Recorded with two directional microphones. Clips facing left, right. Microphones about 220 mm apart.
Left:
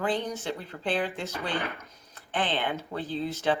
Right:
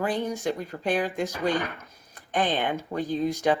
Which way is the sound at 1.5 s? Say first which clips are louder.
Right 3 dB; 15° right (ahead or behind).